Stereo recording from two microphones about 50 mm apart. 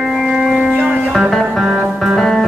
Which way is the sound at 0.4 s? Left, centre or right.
Centre.